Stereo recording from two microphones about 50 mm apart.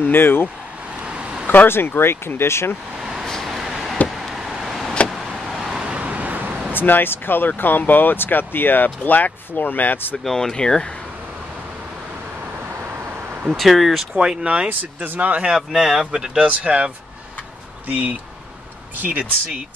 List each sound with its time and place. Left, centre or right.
0.0 s speech: left
1.0 s vehicle: right
1.5 s speech: left
3.0 s vehicle: centre
5.9 s vehicle: right
6.7 s speech: left
10.1 s speech: centre
13.3 s vehicle: right
13.6 s speech: centre
14.2 s speech: right
14.7 s speech: right
15.5 s speech: centre
16.4 s speech: right